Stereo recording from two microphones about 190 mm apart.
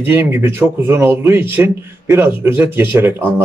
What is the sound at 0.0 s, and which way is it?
Speech, 10° right (ahead or behind).